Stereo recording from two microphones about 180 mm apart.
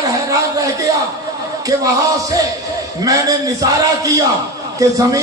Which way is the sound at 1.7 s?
20° right (ahead or behind).